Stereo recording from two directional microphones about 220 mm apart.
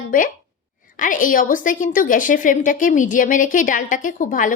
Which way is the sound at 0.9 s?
35° left (ahead or behind).